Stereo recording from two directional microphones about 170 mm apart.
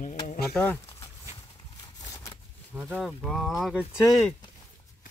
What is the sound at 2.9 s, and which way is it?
Speech, centre (ahead or behind).